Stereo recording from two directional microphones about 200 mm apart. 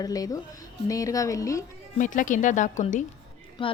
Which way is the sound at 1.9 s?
40° left (ahead or behind).